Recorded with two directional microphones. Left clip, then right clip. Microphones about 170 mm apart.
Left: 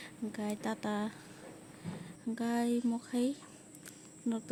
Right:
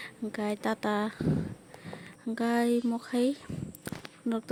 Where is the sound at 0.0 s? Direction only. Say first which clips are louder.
Right 6 dB; 35° right (ahead or behind).